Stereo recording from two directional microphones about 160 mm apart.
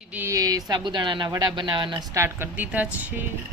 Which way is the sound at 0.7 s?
25° right (ahead or behind).